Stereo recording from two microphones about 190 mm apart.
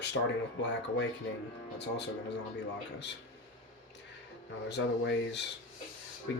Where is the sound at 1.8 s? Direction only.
65° left (ahead or behind).